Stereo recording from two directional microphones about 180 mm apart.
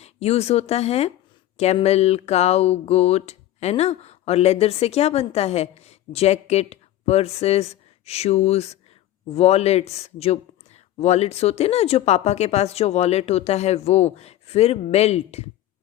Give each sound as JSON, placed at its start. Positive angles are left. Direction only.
{"t": 0.0, "sound": "speech", "side_deg": 35}